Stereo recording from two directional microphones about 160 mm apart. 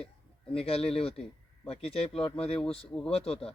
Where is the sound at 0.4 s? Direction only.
35° left (ahead or behind).